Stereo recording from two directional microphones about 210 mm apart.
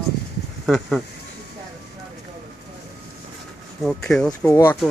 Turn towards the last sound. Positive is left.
turn(degrees=10)  # may be behind; listen again after turning